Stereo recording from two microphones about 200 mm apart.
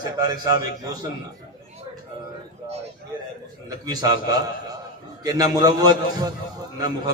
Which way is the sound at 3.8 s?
20° right (ahead or behind).